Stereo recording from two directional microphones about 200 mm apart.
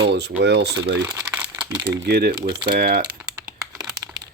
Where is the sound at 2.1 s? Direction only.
50° right (ahead or behind).